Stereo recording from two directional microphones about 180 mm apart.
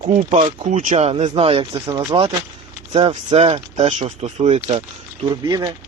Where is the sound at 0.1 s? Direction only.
35° right (ahead or behind).